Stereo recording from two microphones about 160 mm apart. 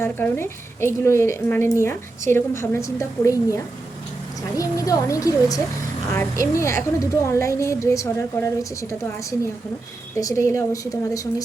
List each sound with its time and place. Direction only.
0.0 s a woman's voice: 15° left (ahead or behind)
10.2 s a woman's voice: 20° left (ahead or behind)